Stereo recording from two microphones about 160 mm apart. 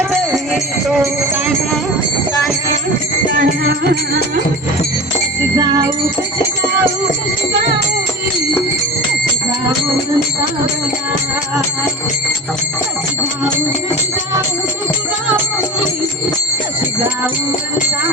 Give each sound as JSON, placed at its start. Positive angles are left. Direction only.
{"t": 0.1, "sound": "music", "side_deg": 0}
{"t": 3.3, "sound": "music", "side_deg": -80}